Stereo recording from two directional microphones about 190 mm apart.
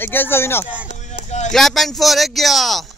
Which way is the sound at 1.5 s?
Centre (ahead or behind).